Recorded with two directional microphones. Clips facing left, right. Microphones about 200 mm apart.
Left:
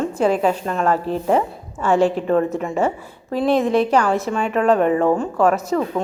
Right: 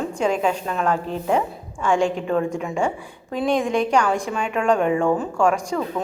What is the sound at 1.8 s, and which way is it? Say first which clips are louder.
A woman's voice: left 3 dB; 5° left (ahead or behind).